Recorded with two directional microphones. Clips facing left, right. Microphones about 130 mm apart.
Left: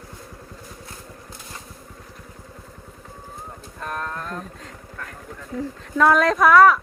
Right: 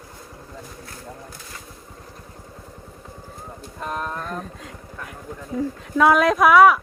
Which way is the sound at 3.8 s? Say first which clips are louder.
Right 2 dB; 20° right (ahead or behind).